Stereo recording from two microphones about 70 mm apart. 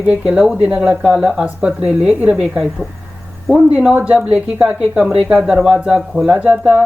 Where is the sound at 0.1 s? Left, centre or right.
Centre.